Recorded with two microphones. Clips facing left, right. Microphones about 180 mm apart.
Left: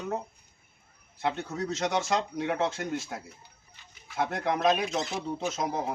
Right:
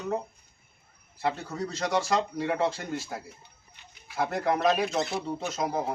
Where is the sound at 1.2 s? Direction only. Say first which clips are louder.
Even; centre (ahead or behind).